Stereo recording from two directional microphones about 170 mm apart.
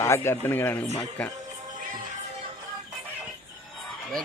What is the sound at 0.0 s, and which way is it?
Speech, 15° left (ahead or behind).